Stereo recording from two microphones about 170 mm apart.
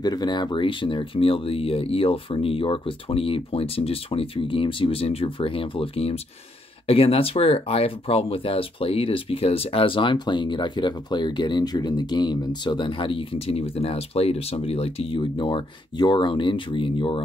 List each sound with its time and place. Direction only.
0.0 s speech: 25° left (ahead or behind)